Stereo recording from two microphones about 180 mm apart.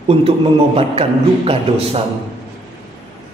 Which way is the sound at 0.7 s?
30° right (ahead or behind).